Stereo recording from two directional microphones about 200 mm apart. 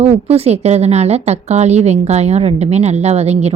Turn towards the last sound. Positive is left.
turn(degrees=-30)  # may be behind; listen again after turning